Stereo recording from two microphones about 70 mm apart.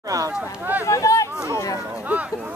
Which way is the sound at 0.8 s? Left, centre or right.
Left.